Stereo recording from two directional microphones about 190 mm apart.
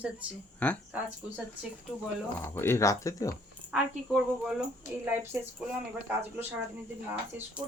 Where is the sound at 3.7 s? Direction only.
5° right (ahead or behind).